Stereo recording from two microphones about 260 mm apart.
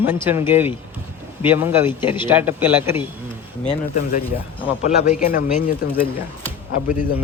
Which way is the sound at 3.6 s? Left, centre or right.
Left.